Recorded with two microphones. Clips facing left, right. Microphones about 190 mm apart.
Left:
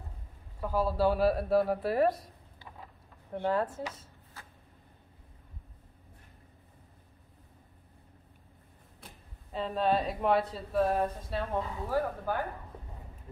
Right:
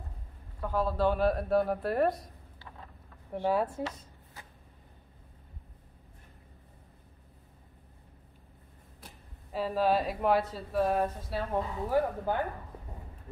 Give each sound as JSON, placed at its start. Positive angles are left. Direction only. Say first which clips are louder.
{"t": 0.6, "sound": "speech", "louder": "left 1 dB", "side_deg": 10}
{"t": 3.3, "sound": "speech", "louder": "right 1 dB", "side_deg": -10}
{"t": 4.0, "sound": "a sound", "louder": "right 1 dB", "side_deg": -15}
{"t": 9.0, "sound": "speech", "louder": "even", "side_deg": -5}
{"t": 11.5, "sound": "speech", "louder": "right 4 dB", "side_deg": -15}